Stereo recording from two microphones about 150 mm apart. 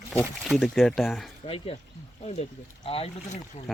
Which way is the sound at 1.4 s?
40° left (ahead or behind).